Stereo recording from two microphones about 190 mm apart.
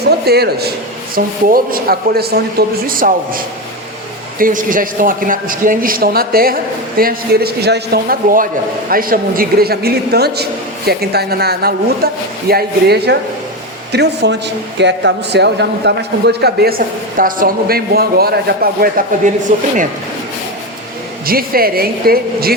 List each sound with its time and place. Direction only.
0.0 s a man's voice: 60° right (ahead or behind)
19.5 s speech: 40° right (ahead or behind)
21.2 s a man's voice: 50° right (ahead or behind)